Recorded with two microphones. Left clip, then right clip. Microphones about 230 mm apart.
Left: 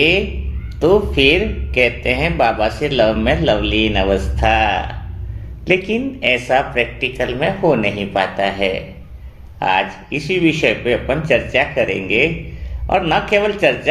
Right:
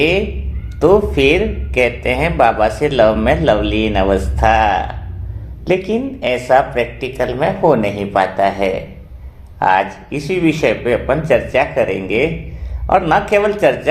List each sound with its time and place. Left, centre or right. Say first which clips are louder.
0.8 s speech: right 2 dB; right